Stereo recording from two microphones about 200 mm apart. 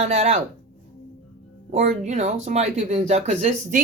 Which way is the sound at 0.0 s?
35° right (ahead or behind).